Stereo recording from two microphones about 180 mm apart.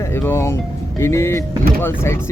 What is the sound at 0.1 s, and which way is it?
Speech, 10° left (ahead or behind).